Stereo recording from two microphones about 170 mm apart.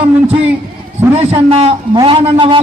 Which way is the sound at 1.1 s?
35° right (ahead or behind).